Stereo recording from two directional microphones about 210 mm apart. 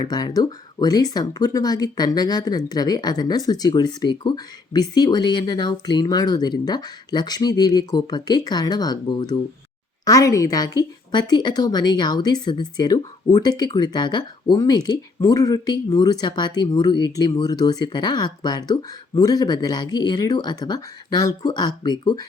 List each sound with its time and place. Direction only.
0.1 s speech: 20° left (ahead or behind)